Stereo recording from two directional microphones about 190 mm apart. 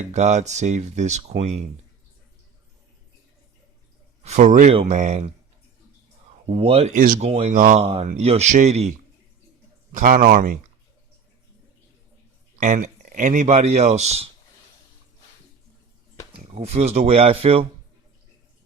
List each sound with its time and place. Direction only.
0.0 s speech: 35° right (ahead or behind)
4.2 s speech: 35° right (ahead or behind)
4.7 s speech: 30° right (ahead or behind)
4.9 s speech: 40° right (ahead or behind)
6.5 s speech: 30° right (ahead or behind)
7.3 s speech: 30° right (ahead or behind)
7.5 s a man's voice: 45° right (ahead or behind)
7.8 s a man's voice: 30° right (ahead or behind); by 10.6 s 50° right (ahead or behind)
12.5 s speech: 40° right (ahead or behind)
16.4 s speech: 35° right (ahead or behind)